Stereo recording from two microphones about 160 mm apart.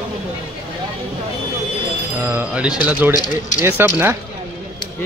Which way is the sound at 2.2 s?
10° right (ahead or behind).